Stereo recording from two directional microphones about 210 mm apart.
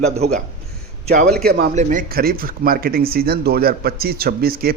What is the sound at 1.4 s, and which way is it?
Speech, 45° right (ahead or behind).